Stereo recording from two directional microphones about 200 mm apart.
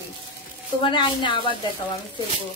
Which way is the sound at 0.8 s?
25° left (ahead or behind).